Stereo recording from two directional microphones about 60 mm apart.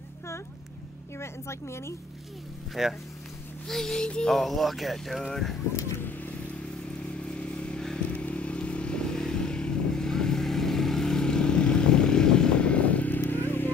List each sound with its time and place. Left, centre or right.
1.1 s a woman's voice: left
2.7 s speech: centre
3.6 s speech: centre
4.4 s speech: centre
5.9 s vehicle: left
7.2 s vehicle: centre